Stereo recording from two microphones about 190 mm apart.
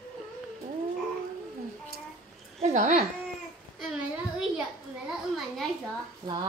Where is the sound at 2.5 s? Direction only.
35° right (ahead or behind).